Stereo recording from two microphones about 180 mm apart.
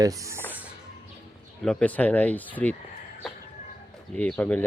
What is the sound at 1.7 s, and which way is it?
Speech, 5° left (ahead or behind).